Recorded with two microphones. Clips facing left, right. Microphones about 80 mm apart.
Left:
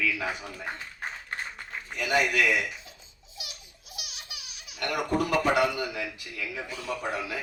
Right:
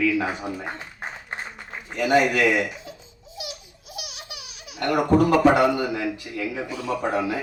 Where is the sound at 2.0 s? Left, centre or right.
Right.